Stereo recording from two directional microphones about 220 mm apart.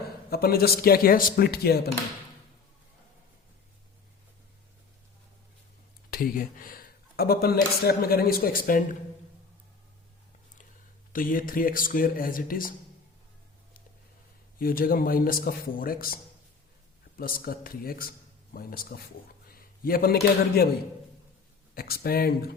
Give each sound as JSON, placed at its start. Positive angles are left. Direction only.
{"t": 0.3, "sound": "speech", "side_deg": 45}
{"t": 6.1, "sound": "speech", "side_deg": 40}
{"t": 11.1, "sound": "speech", "side_deg": 40}
{"t": 14.6, "sound": "speech", "side_deg": 40}
{"t": 17.2, "sound": "a man's voice", "side_deg": 40}
{"t": 21.8, "sound": "speech", "side_deg": 45}